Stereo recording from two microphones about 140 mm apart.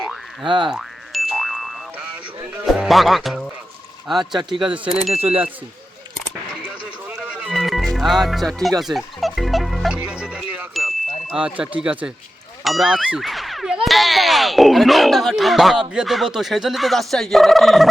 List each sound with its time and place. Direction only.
0.4 s speech: 35° right (ahead or behind)
0.7 s boing: centre (ahead or behind)
2.6 s speech: centre (ahead or behind)
4.4 s speech: 30° right (ahead or behind)
4.6 s speech: 5° right (ahead or behind)
5.1 s speech: 45° right (ahead or behind)
7.2 s music: 5° right (ahead or behind)
11.3 s speech: 10° right (ahead or behind)